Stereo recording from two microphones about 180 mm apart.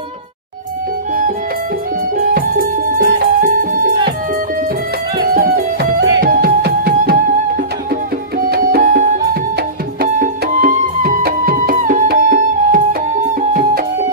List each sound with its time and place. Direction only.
2.1 s music: 55° right (ahead or behind)
5.2 s music: 55° right (ahead or behind)